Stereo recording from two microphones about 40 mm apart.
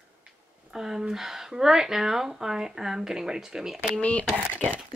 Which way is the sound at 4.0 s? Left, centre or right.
Left.